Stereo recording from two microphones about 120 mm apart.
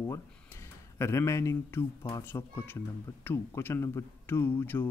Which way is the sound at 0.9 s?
25° left (ahead or behind).